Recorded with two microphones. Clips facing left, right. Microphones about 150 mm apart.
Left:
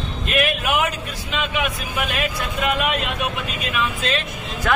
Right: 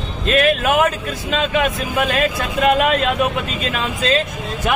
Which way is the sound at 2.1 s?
40° right (ahead or behind).